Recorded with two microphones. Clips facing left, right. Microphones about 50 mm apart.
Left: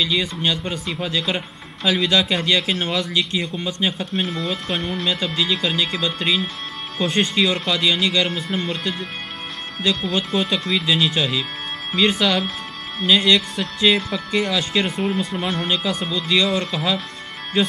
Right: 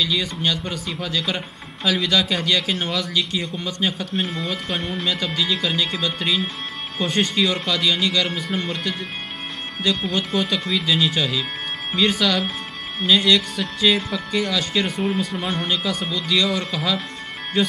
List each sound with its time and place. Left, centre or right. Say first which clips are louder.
0.0 s speech: left 1 dB; centre
3.3 s speech: left 2 dB; centre
4.8 s speech: left 1 dB; centre
7.4 s speech: left 1 dB; centre
10.3 s speech: left 1 dB; centre